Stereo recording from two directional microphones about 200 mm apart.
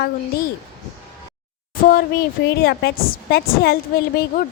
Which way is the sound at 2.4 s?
55° left (ahead or behind).